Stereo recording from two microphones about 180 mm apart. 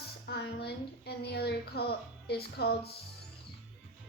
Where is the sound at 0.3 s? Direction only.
65° left (ahead or behind).